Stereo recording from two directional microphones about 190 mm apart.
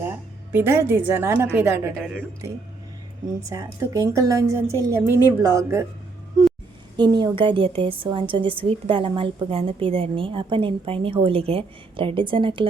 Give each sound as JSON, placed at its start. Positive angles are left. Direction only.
{"t": 0.5, "sound": "a woman's voice", "side_deg": -10}
{"t": 3.5, "sound": "a woman's voice", "side_deg": -15}
{"t": 6.9, "sound": "a woman's voice", "side_deg": -25}